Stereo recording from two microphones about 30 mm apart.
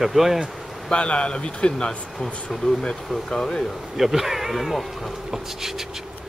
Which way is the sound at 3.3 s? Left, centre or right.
Left.